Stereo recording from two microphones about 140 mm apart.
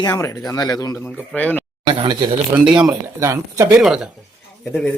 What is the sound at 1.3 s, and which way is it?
Speech, 10° left (ahead or behind).